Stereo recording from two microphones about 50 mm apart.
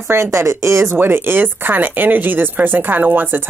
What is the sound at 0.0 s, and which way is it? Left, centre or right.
Speech, right.